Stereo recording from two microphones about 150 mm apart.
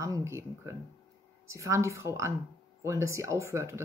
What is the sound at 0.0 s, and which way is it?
Speech, 20° right (ahead or behind).